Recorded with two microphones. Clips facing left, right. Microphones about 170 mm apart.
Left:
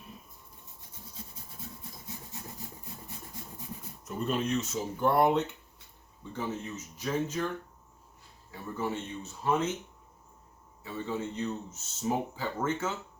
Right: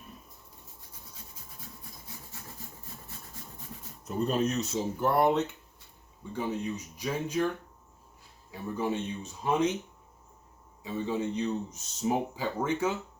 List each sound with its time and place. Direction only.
4.0 s speech: 40° right (ahead or behind)
4.9 s speech: centre (ahead or behind)
6.3 s speech: 15° right (ahead or behind)
8.4 s speech: 15° right (ahead or behind)
10.9 s speech: 15° right (ahead or behind)